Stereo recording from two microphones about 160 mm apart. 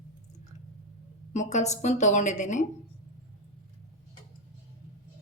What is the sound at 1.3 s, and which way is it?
A woman's voice, 45° left (ahead or behind).